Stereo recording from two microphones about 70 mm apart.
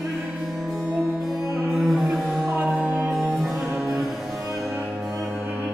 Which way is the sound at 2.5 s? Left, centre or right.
Right.